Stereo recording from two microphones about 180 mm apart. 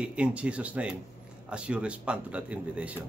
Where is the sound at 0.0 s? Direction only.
5° right (ahead or behind).